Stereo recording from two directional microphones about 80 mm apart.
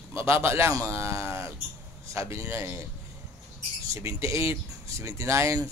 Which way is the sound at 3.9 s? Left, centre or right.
Right.